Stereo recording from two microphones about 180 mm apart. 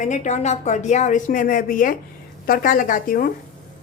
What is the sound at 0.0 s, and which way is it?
A woman's voice, 40° left (ahead or behind).